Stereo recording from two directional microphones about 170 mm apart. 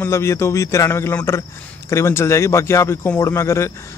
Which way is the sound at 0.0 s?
15° left (ahead or behind).